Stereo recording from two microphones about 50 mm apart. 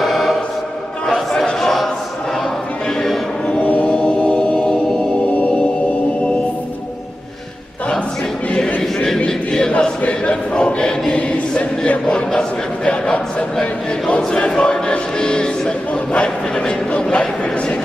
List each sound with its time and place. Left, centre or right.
0.0 s choir: centre
1.0 s a sound: centre
3.6 s music: left
3.9 s music: centre
8.5 s choir: left
8.8 s a sound: centre
9.2 s choir: centre
14.5 s music: centre